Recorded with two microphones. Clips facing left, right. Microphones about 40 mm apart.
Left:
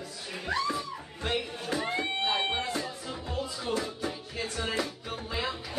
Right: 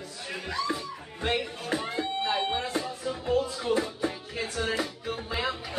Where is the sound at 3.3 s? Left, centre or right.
Right.